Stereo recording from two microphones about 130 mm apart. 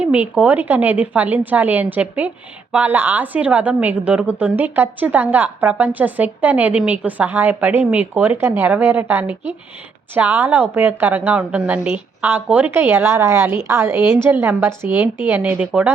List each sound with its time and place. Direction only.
0.0 s a woman's voice: 10° right (ahead or behind)